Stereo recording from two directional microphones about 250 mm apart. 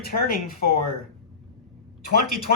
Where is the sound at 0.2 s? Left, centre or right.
Left.